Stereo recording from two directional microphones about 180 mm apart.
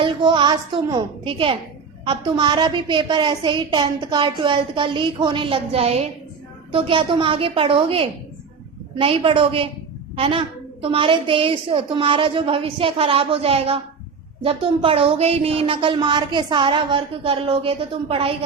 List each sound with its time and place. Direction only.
0.0 s a woman's voice: 25° right (ahead or behind)